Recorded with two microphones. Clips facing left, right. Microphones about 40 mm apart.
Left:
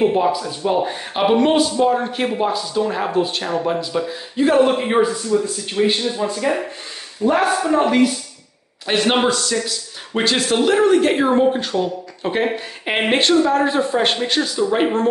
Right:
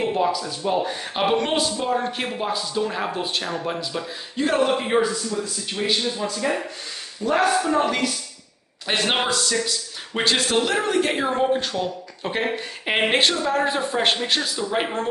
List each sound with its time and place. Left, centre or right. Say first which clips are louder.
0.0 s speech: left 5 dB; centre
5.0 s speech: left 6 dB; left
8.8 s speech: left 5 dB; centre